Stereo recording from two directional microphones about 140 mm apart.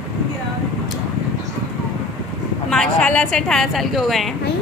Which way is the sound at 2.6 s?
5° left (ahead or behind).